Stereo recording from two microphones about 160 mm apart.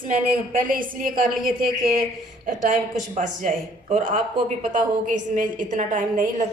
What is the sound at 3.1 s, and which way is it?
A woman's voice, 55° right (ahead or behind).